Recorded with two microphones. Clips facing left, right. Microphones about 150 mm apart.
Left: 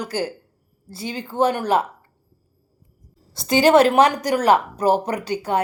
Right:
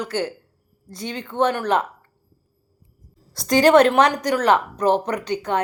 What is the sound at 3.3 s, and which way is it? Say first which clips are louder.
Speech: even; 5° left (ahead or behind).